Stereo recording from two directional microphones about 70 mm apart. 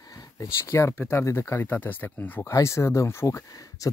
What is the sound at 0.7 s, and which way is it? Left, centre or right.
Speech, left.